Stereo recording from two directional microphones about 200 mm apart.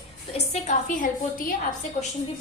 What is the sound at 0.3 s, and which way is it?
A woman's voice, 35° left (ahead or behind).